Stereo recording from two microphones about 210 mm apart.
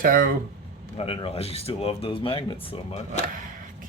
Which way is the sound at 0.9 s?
25° left (ahead or behind).